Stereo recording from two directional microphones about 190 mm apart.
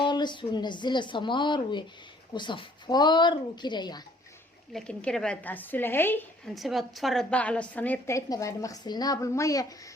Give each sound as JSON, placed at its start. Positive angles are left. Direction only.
{"t": 0.0, "sound": "speech", "side_deg": 25}
{"t": 4.7, "sound": "a woman's voice", "side_deg": 5}